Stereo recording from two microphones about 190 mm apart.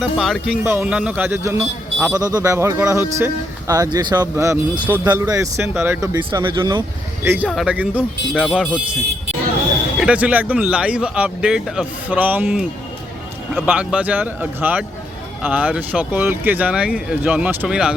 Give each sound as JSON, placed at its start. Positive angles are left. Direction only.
{"t": 0.0, "sound": "speech", "side_deg": 0}
{"t": 7.4, "sound": "speech", "side_deg": 0}
{"t": 8.3, "sound": "speech", "side_deg": 5}
{"t": 10.0, "sound": "speech", "side_deg": -5}